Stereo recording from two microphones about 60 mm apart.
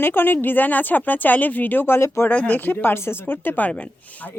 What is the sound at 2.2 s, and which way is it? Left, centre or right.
Speech, left.